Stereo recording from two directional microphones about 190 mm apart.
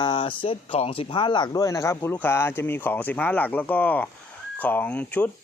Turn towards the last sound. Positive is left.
turn(degrees=10)  # may be behind; listen again after turning